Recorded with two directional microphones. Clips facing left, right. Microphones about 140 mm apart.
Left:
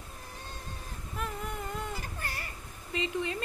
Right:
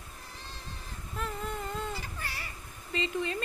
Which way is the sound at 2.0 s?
45° left (ahead or behind).